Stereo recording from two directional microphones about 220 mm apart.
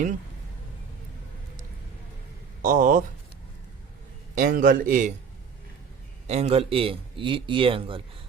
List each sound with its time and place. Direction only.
2.6 s speech: 40° right (ahead or behind)
4.4 s a man's voice: 40° right (ahead or behind)
6.2 s a man's voice: 30° right (ahead or behind)